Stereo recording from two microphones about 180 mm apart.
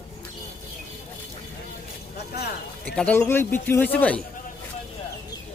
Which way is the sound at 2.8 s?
5° left (ahead or behind).